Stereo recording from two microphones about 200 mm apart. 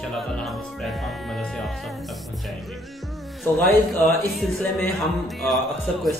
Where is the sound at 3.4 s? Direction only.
Centre (ahead or behind).